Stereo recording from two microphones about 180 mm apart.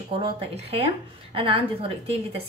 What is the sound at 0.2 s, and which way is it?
A woman's voice, 35° right (ahead or behind).